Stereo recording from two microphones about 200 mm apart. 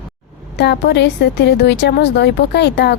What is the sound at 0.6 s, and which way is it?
A woman's voice, 55° left (ahead or behind).